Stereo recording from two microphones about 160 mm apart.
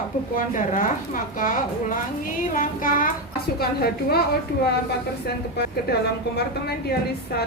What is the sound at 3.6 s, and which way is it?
Speech, 75° left (ahead or behind).